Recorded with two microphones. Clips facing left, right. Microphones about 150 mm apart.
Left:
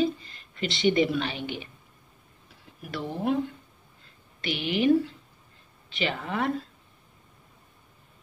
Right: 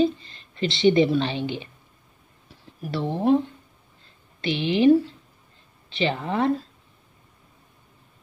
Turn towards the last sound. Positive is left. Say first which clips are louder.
# right 5 dB
turn(degrees=-30)  # may be behind; listen again after turning